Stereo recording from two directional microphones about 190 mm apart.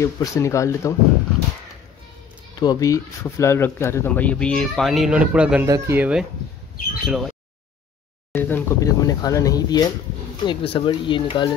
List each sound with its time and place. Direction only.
0.0 s speech: 15° left (ahead or behind)
2.6 s speech: 20° left (ahead or behind); by 6.2 s 5° right (ahead or behind)
7.1 s a sound: centre (ahead or behind)
8.3 s speech: 10° left (ahead or behind); by 11.4 s 25° left (ahead or behind)